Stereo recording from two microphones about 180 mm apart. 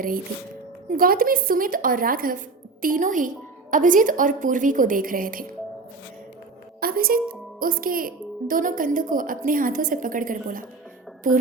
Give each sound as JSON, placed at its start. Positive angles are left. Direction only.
{"t": 0.9, "sound": "a woman's voice", "side_deg": -55}
{"t": 6.7, "sound": "music", "side_deg": -55}
{"t": 7.6, "sound": "a woman's voice", "side_deg": -50}